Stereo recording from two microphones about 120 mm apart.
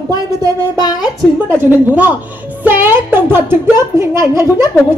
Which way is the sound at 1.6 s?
15° right (ahead or behind).